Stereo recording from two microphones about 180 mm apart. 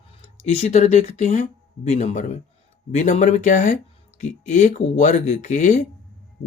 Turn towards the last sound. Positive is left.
turn(degrees=40)  # may be behind; listen again after turning